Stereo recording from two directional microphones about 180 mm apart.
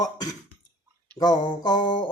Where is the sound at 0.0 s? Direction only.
20° left (ahead or behind).